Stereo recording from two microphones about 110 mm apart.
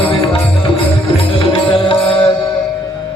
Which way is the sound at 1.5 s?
55° left (ahead or behind).